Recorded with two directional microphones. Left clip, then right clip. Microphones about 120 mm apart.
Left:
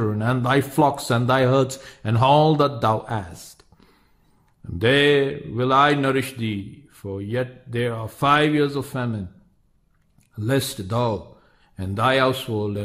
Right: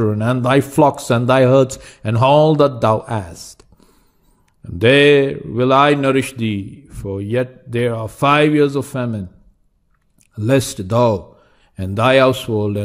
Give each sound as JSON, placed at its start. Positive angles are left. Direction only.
{"t": 0.2, "sound": "speech", "side_deg": -35}
{"t": 4.7, "sound": "speech", "side_deg": -35}
{"t": 10.3, "sound": "a man's voice", "side_deg": -35}